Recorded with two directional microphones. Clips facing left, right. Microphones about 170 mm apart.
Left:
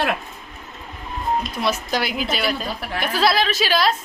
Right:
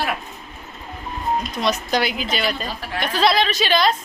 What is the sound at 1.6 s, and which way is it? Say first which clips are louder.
A woman's voice: right 2 dB; 5° left (ahead or behind).